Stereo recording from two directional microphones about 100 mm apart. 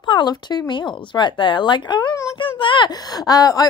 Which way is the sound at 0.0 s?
50° left (ahead or behind).